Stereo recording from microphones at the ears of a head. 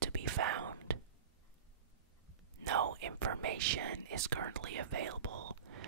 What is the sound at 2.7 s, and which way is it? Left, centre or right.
Whispering, right.